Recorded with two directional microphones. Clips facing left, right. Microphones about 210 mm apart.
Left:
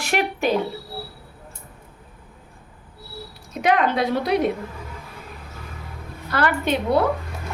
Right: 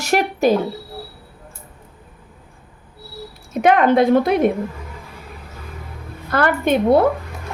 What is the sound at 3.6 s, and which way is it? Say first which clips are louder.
Speech: right 6 dB; 55° right (ahead or behind).